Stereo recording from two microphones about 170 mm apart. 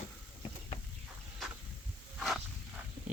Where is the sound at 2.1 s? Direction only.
Centre (ahead or behind).